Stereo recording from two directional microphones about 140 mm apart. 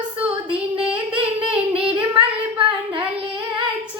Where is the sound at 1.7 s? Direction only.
40° right (ahead or behind).